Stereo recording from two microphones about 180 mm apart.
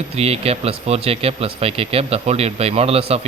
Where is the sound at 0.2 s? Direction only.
35° right (ahead or behind).